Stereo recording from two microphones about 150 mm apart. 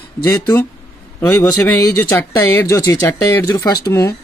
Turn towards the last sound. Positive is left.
turn(degrees=20)  # may be behind; listen again after turning